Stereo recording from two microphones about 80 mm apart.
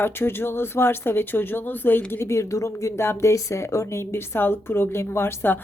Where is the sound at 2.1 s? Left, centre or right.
Left.